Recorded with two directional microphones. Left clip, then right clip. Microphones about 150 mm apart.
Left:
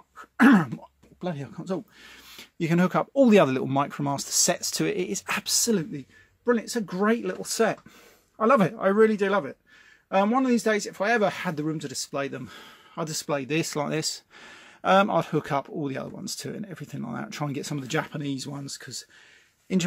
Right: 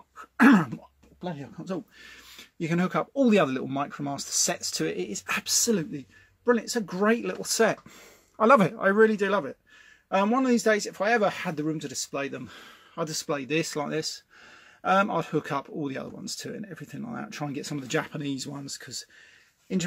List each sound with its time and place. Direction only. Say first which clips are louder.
0.2 s throat clearing: even; 10° left (ahead or behind)
1.2 s speech: left 3 dB; 35° left (ahead or behind); by 7.3 s 10° left (ahead or behind)
7.3 s speech: right 1 dB; centre (ahead or behind); by 19.0 s 20° left (ahead or behind)
19.7 s speech: left 3 dB; 40° left (ahead or behind)